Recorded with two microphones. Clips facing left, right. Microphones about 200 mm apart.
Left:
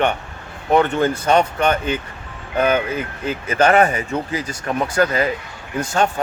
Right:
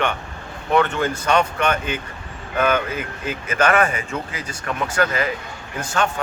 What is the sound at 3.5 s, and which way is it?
Speech, 35° left (ahead or behind).